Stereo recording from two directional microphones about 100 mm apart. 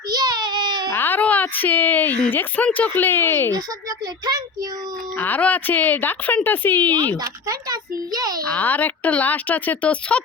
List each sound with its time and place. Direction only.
0.1 s baby cry: 40° right (ahead or behind)
0.9 s speech: 20° left (ahead or behind)
3.5 s a child's voice: 35° right (ahead or behind)
5.1 s a woman's voice: 15° left (ahead or behind)
7.2 s a child's voice: 40° right (ahead or behind)
8.4 s a woman's voice: 15° left (ahead or behind)